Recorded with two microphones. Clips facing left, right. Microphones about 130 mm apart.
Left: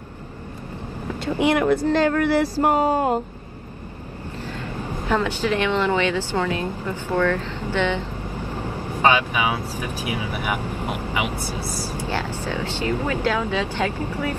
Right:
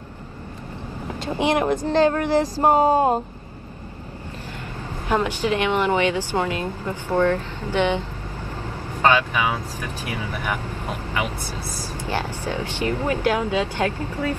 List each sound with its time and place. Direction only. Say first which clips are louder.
1.3 s speech: left 2 dB; 20° right (ahead or behind)
5.0 s speech: right 1 dB; 15° right (ahead or behind)
8.4 s speech: left 3 dB; 15° left (ahead or behind)
13.0 s speech: right 3 dB; 15° right (ahead or behind)
13.8 s speech: even; 15° left (ahead or behind)